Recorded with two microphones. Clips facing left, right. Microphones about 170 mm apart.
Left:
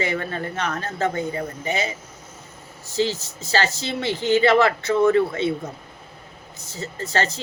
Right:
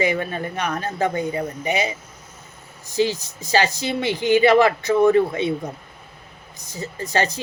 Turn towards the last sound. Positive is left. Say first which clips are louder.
# right 2 dB
turn(degrees=-15)  # may be behind; listen again after turning